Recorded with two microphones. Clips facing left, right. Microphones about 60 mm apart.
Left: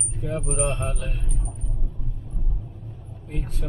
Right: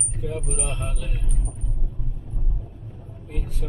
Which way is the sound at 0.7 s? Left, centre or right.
Left.